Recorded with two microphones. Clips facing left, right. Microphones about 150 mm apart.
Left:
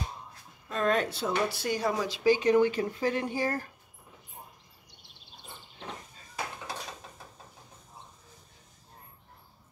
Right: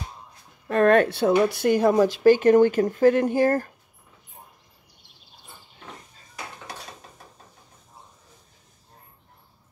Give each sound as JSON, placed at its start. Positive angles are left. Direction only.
{"t": 0.7, "sound": "speech", "side_deg": -65}